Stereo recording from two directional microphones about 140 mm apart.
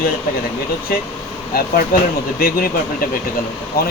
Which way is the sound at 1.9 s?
90° left.